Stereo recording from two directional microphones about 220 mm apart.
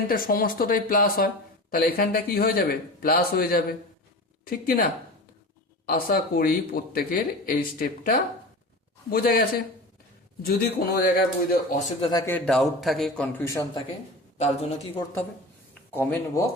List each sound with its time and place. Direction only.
0.1 s a man's voice: 40° left (ahead or behind)
11.7 s a man's voice: 30° left (ahead or behind)
12.2 s a man's voice: 5° left (ahead or behind)
14.3 s a man's voice: 30° left (ahead or behind)
15.9 s speech: 10° left (ahead or behind)